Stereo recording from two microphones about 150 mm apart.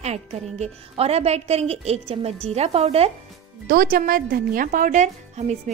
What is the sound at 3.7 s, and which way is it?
Speech, 70° right (ahead or behind).